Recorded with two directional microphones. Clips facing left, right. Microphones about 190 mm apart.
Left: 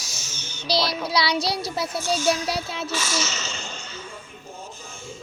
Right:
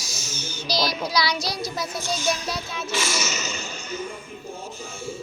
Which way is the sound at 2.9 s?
10° right (ahead or behind).